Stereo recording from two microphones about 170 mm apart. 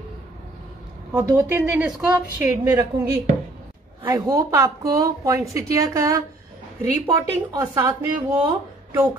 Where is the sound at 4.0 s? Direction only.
20° right (ahead or behind).